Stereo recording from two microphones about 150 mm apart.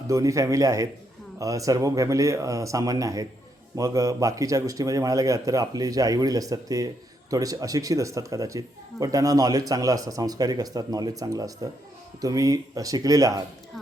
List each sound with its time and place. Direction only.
0.1 s a man's voice: 20° right (ahead or behind)